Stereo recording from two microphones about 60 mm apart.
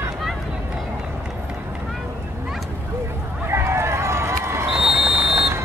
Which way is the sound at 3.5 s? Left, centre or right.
Right.